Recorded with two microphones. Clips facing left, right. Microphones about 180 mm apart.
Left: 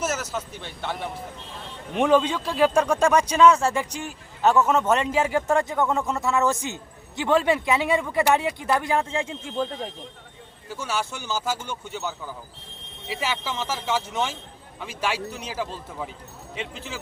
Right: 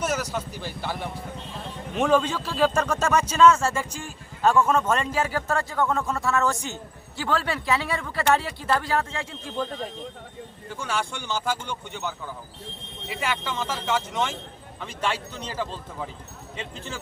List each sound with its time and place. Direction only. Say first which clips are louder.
0.0 s speech: right 1 dB; 5° left (ahead or behind)
2.0 s a man's voice: left 2 dB; 10° left (ahead or behind)
10.7 s speech: left 1 dB; 5° left (ahead or behind)